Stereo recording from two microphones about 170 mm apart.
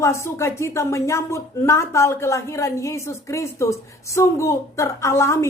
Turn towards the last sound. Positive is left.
turn(degrees=15)  # may be behind; listen again after turning